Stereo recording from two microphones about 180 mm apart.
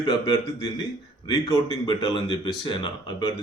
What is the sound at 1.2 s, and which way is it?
Speech, 25° left (ahead or behind).